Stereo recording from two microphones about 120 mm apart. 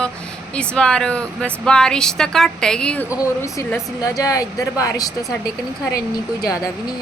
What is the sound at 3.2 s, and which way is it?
Speech, 25° left (ahead or behind).